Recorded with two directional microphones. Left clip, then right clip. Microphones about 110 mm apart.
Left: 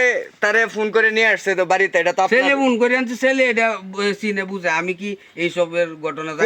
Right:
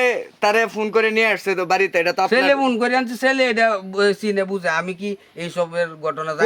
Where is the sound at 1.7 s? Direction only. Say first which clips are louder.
Right 1 dB; 30° right (ahead or behind).